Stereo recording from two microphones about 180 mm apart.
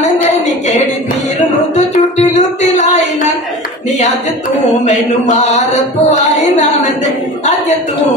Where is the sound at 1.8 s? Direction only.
40° left (ahead or behind).